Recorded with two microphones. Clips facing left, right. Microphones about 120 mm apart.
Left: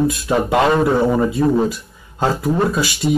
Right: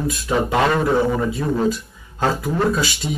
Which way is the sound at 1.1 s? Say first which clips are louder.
Left 5 dB; 15° left (ahead or behind).